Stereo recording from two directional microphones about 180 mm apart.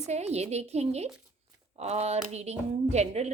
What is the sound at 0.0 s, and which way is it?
A woman's voice, 35° right (ahead or behind).